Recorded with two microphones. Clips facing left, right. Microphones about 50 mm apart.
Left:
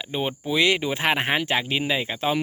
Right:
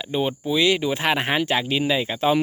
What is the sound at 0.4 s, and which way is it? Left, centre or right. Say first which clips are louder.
Speech: even; left.